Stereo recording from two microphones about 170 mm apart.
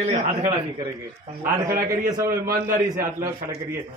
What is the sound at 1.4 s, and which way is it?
Speech, 20° right (ahead or behind).